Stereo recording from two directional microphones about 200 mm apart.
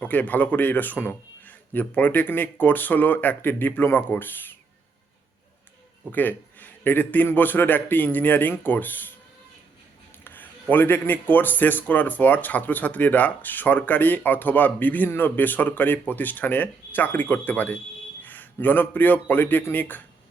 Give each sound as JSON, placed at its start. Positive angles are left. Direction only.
{"t": 0.0, "sound": "a man's voice", "side_deg": 10}
{"t": 6.1, "sound": "a man's voice", "side_deg": 10}
{"t": 10.2, "sound": "a man's voice", "side_deg": 10}